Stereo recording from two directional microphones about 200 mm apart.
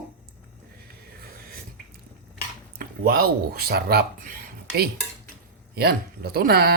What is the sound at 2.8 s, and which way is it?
Speech, 50° right (ahead or behind).